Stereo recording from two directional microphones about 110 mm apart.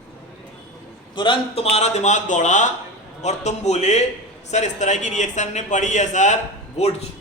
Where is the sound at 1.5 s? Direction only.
85° left.